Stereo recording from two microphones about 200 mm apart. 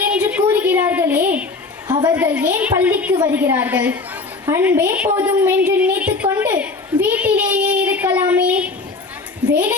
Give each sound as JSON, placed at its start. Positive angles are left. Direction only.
{"t": 0.0, "sound": "a sound", "side_deg": -5}
{"t": 1.9, "sound": "a woman's voice", "side_deg": -20}
{"t": 2.1, "sound": "a woman's voice", "side_deg": -10}